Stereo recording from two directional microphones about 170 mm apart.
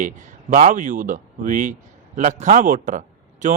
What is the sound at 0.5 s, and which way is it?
Speech, 50° right (ahead or behind).